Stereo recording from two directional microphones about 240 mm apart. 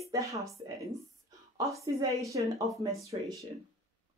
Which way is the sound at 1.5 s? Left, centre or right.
Centre.